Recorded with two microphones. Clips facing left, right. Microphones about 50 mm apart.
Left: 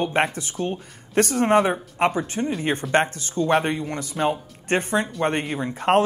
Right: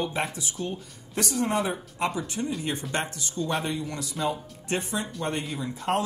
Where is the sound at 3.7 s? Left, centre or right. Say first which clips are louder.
Left 5 dB; left.